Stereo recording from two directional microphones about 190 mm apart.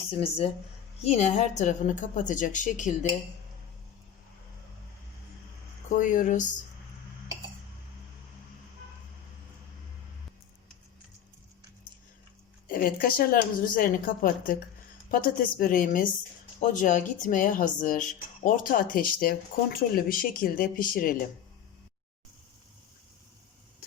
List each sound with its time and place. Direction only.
1.0 s a woman's voice: 35° left (ahead or behind)
6.0 s a woman's voice: 40° left (ahead or behind)
12.6 s speech: 50° left (ahead or behind)